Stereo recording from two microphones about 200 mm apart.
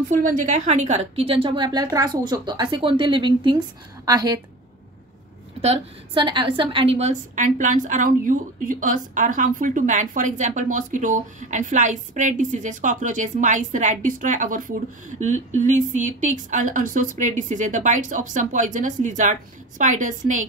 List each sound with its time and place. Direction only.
0.1 s a woman's voice: 40° right (ahead or behind); by 4.4 s 20° right (ahead or behind)
5.6 s a woman's voice: 30° right (ahead or behind)